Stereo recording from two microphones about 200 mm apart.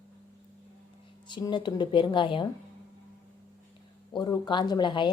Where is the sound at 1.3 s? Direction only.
20° left (ahead or behind).